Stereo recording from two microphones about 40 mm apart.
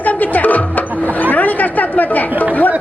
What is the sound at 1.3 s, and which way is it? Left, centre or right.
Speech, left.